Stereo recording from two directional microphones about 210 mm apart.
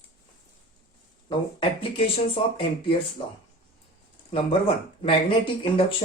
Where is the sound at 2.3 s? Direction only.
25° left (ahead or behind).